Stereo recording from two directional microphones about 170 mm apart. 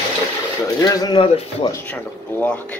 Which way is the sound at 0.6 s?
20° left (ahead or behind).